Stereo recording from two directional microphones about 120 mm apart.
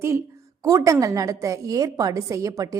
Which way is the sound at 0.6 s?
25° right (ahead or behind).